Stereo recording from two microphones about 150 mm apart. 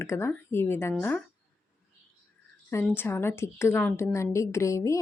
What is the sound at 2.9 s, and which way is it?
A woman's voice, 15° left (ahead or behind).